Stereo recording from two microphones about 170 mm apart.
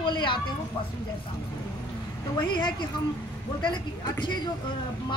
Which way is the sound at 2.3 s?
25° left (ahead or behind).